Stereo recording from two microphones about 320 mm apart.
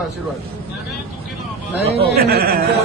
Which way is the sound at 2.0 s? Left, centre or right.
Right.